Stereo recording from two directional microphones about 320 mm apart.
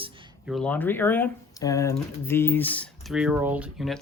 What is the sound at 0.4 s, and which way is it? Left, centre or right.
Speech, centre.